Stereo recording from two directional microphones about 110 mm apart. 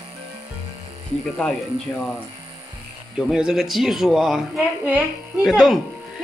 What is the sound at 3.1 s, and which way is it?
Speech, 5° right (ahead or behind).